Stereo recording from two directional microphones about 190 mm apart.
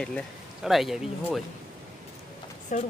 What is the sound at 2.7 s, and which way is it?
Speech, 40° left (ahead or behind).